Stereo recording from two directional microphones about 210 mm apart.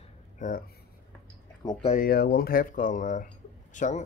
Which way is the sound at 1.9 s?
45° left (ahead or behind).